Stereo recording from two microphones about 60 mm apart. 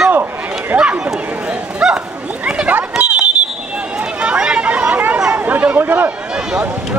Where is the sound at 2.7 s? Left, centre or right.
Right.